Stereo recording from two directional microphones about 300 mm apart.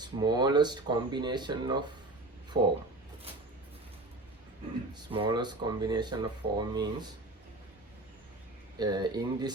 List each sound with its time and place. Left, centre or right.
0.0 s speech: centre
2.5 s speech: right
5.1 s speech: centre
8.8 s speech: centre